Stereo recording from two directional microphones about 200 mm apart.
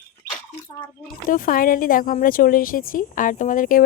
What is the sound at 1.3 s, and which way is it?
Speech, 45° left (ahead or behind).